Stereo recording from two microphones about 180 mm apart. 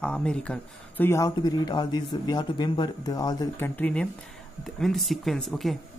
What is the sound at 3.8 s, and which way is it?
Speech, 5° left (ahead or behind).